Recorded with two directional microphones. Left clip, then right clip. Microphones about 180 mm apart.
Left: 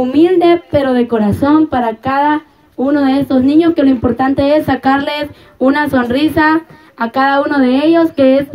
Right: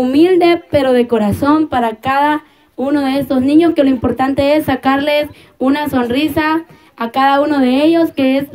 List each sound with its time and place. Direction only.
0.0 s a woman's voice: 25° right (ahead or behind)